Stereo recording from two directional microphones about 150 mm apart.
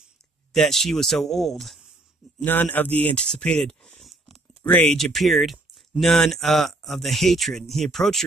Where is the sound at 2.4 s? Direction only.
10° left (ahead or behind).